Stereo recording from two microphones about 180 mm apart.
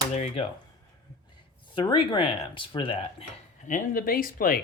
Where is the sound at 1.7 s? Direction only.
25° left (ahead or behind).